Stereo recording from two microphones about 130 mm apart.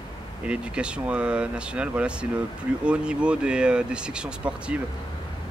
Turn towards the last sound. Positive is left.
turn(degrees=-10)  # may be behind; listen again after turning